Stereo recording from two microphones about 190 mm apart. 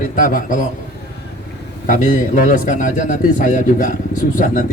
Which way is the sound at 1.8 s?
40° left (ahead or behind).